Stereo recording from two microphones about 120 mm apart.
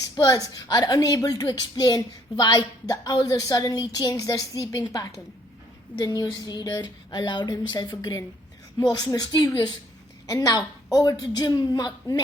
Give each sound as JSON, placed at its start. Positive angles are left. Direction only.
{"t": 0.2, "sound": "a woman's voice", "side_deg": 30}